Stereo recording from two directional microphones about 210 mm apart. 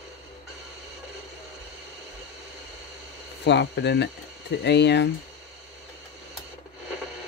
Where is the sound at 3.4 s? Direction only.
55° left (ahead or behind).